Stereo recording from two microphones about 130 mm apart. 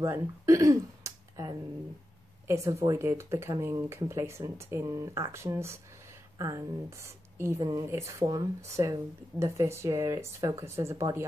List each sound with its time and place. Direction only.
0.0 s speech: 25° right (ahead or behind)